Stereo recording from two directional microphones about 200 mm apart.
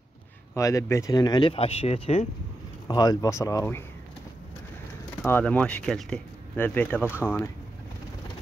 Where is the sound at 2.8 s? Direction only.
20° left (ahead or behind).